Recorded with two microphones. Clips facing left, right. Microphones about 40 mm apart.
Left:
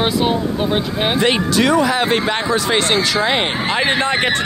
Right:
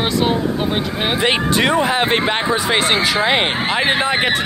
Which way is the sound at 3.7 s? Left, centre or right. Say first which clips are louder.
Left 2 dB; centre.